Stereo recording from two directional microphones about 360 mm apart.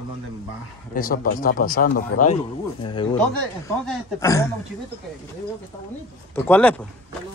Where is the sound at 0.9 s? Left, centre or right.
Left.